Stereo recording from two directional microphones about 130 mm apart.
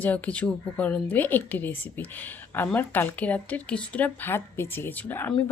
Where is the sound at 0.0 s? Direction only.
10° left (ahead or behind).